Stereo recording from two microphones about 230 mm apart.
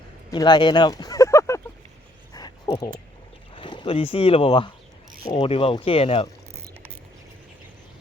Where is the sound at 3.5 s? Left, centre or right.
Left.